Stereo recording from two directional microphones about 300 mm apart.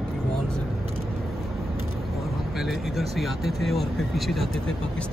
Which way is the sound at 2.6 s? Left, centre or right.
Centre.